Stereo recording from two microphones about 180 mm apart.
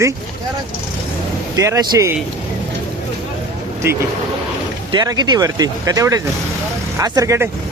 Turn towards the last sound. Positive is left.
turn(degrees=-15)  # may be behind; listen again after turning